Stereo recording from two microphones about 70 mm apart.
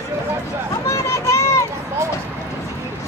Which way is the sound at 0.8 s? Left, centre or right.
Left.